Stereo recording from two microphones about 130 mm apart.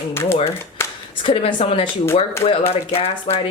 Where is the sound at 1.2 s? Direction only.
40° left (ahead or behind).